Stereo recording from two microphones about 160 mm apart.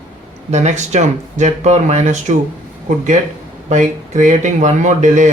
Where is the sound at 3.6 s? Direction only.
50° right (ahead or behind).